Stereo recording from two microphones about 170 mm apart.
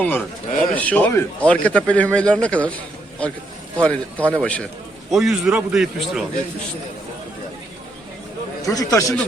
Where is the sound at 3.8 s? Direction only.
5° left (ahead or behind).